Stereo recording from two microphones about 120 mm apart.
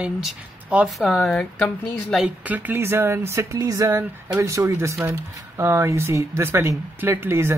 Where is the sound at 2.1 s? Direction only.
10° right (ahead or behind).